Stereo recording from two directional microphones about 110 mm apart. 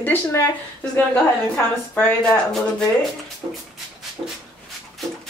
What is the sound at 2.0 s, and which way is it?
Speech, 10° left (ahead or behind).